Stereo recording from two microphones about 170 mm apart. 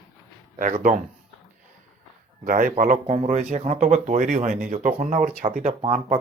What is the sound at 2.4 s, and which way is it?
Speech, 50° right (ahead or behind).